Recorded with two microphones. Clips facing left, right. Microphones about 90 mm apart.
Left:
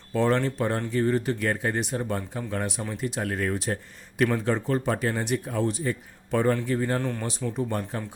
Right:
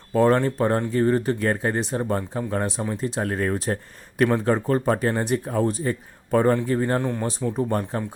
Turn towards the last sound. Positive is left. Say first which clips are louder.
# right 5 dB
turn(degrees=-40)  # may be behind; listen again after turning